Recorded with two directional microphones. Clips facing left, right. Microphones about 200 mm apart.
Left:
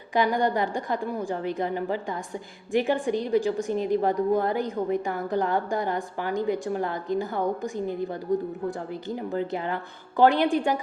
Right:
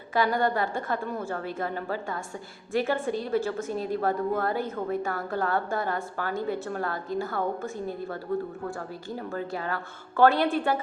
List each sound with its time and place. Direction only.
0.1 s a woman's voice: 15° left (ahead or behind)